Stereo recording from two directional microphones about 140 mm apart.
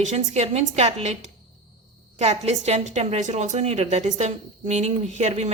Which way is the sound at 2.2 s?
50° right (ahead or behind).